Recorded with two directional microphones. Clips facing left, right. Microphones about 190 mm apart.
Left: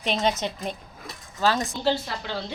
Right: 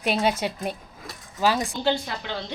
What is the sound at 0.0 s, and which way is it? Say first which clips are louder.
Speech: right 1 dB; 10° right (ahead or behind).